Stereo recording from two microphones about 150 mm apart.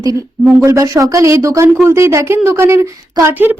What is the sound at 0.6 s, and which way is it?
Speech, 25° right (ahead or behind).